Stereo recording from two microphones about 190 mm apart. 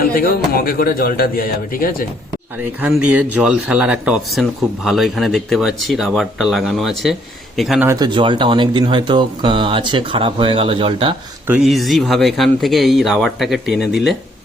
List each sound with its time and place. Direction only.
0.0 s speech: 50° left (ahead or behind)
2.8 s speech: 10° right (ahead or behind)
7.9 s speech: 20° right (ahead or behind)
11.4 s speech: 5° right (ahead or behind)